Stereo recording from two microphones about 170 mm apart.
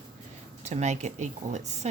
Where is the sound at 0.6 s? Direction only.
40° right (ahead or behind).